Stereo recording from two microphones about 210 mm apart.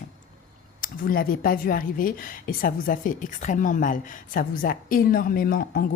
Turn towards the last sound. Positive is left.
turn(degrees=45)  # may be behind; listen again after turning